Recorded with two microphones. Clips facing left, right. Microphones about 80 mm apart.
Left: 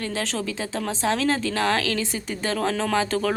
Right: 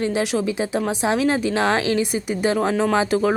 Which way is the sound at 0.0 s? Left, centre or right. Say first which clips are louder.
Right 7 dB; centre.